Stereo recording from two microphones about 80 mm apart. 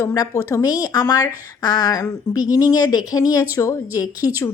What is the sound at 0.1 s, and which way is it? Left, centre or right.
A woman's voice, left.